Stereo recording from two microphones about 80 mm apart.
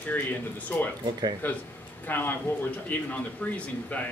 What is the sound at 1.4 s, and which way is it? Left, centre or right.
A man's voice, left.